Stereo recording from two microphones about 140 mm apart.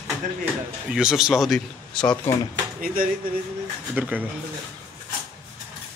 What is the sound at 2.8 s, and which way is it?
Speech, 90° right.